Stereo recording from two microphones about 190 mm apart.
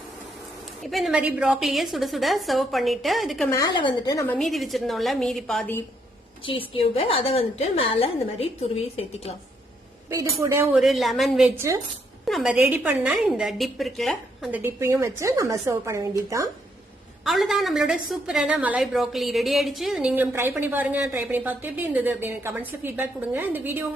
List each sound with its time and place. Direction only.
0.8 s a woman's voice: centre (ahead or behind)
3.5 s a woman's voice: 20° left (ahead or behind)
4.4 s a woman's voice: centre (ahead or behind)
6.4 s a woman's voice: 30° left (ahead or behind)
10.1 s a woman's voice: 15° right (ahead or behind)
12.2 s a woman's voice: centre (ahead or behind)
17.2 s a woman's voice: centre (ahead or behind)